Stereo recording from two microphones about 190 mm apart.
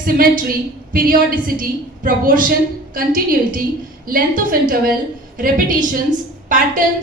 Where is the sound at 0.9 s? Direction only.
50° right (ahead or behind).